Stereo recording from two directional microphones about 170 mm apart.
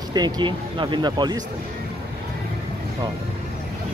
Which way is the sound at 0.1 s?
25° right (ahead or behind).